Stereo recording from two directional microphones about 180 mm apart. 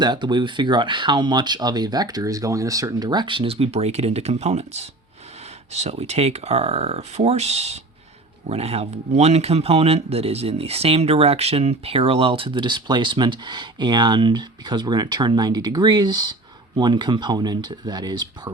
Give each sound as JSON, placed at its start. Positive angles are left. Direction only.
{"t": 0.0, "sound": "speech", "side_deg": -25}